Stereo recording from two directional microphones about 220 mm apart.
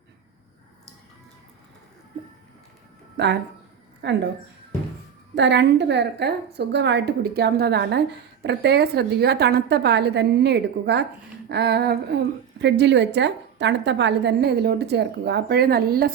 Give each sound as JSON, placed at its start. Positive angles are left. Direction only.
{"t": 3.2, "sound": "a woman's voice", "side_deg": -50}
{"t": 5.3, "sound": "a woman's voice", "side_deg": -55}